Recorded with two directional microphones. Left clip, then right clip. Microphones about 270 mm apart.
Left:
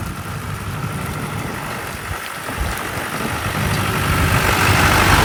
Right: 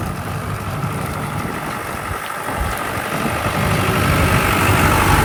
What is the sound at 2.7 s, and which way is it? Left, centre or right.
Vehicle, centre.